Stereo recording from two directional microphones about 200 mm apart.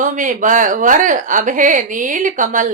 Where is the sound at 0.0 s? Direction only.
40° right (ahead or behind).